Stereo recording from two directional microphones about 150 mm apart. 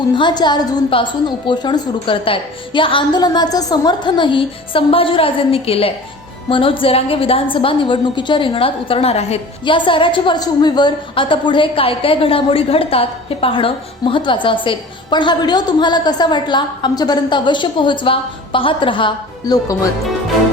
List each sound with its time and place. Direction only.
0.2 s a woman's voice: 30° left (ahead or behind)